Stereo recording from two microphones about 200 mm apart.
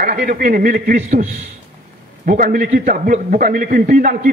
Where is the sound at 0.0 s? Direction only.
40° right (ahead or behind).